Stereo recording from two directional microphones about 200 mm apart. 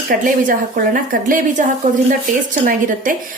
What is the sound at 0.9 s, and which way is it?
A woman's voice, 40° right (ahead or behind).